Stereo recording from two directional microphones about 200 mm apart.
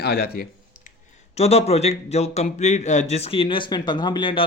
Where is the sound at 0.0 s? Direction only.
50° left (ahead or behind).